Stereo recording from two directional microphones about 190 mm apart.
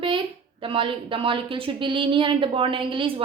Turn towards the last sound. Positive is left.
turn(degrees=-25)  # may be behind; listen again after turning